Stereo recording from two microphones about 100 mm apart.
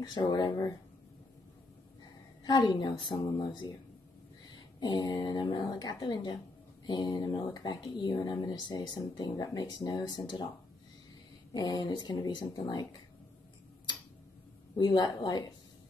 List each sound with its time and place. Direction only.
0.0 s speech: 45° left (ahead or behind)
2.4 s speech: 45° left (ahead or behind)
11.5 s speech: 45° left (ahead or behind)
14.8 s speech: 45° left (ahead or behind)